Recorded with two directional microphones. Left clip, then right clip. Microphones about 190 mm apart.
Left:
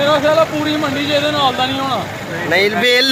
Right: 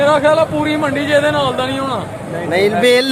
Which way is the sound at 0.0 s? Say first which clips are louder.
Right 1 dB; 30° right (ahead or behind).